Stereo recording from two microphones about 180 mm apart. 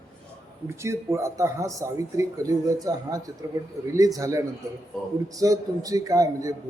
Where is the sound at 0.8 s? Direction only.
15° right (ahead or behind).